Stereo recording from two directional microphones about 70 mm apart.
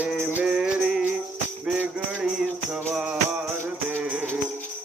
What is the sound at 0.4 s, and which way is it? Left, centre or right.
Music, centre.